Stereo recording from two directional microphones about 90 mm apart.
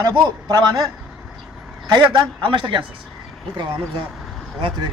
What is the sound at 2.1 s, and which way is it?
Speech, 70° right (ahead or behind).